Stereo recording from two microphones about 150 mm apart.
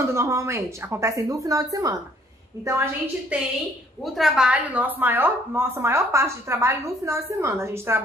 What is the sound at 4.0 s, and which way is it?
A woman's voice, centre (ahead or behind).